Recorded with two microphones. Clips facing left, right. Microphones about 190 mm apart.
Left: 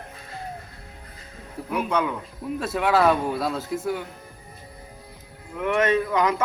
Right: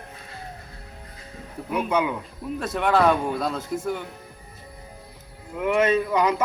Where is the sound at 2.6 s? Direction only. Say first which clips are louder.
Even; 5° left (ahead or behind).